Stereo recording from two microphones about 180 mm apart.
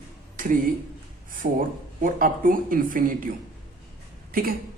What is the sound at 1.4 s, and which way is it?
Speech, 50° right (ahead or behind).